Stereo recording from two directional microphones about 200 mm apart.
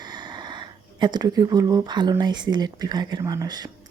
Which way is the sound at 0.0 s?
20° right (ahead or behind).